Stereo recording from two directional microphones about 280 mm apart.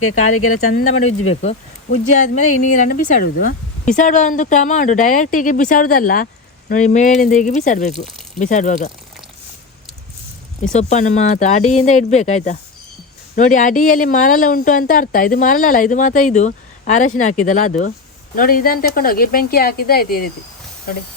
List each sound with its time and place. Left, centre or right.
0.0 s speech: left
1.3 s speech: left
10.6 s speech: left